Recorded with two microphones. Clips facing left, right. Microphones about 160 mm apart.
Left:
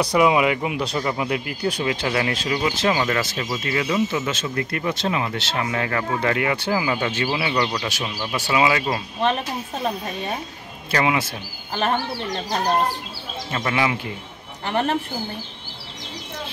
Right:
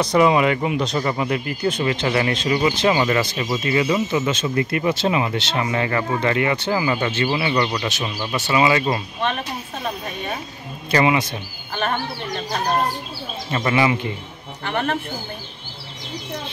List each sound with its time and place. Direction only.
0.0 s speech: 10° left (ahead or behind)
3.3 s speech: 15° right (ahead or behind); by 9.0 s centre (ahead or behind)
10.9 s speech: centre (ahead or behind)
13.5 s speech: centre (ahead or behind)
14.6 s speech: 30° left (ahead or behind)